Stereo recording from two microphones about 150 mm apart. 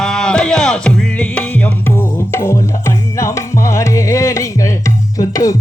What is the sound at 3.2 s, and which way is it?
Music, 20° left (ahead or behind).